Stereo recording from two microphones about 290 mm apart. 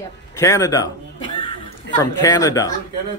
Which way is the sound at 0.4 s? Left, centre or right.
Centre.